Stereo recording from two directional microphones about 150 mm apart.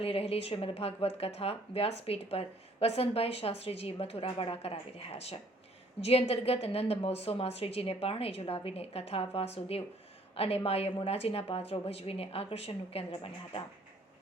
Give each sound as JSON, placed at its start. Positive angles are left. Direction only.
{"t": 0.0, "sound": "a woman's voice", "side_deg": 40}